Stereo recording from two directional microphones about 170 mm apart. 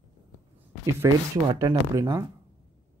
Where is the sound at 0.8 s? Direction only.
15° right (ahead or behind).